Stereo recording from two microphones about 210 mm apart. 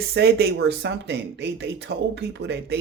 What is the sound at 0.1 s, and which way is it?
Speech, 55° right (ahead or behind).